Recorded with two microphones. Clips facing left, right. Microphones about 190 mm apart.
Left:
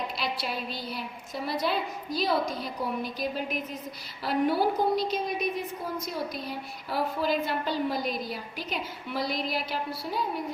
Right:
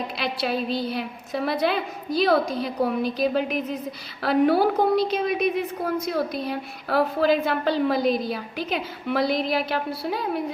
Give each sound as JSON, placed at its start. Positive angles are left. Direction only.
{"t": 0.2, "sound": "a woman's voice", "side_deg": -65}